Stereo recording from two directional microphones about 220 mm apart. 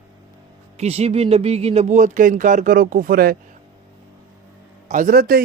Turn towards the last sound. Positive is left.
turn(degrees=-45)  # may be behind; listen again after turning